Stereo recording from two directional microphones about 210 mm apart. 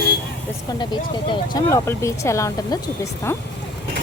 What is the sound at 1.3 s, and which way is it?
Speech, 15° left (ahead or behind).